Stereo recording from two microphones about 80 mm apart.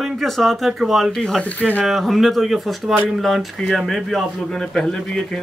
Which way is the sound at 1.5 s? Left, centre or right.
Centre.